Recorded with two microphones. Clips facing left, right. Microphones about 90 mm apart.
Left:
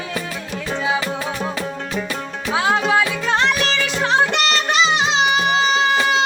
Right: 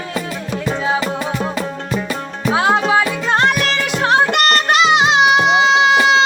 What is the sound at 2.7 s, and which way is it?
Music, 5° right (ahead or behind).